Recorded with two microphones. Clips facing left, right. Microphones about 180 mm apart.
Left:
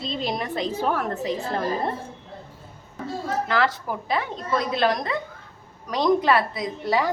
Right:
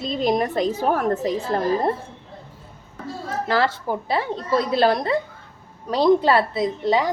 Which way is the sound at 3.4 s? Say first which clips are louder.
Right 5 dB; 30° right (ahead or behind).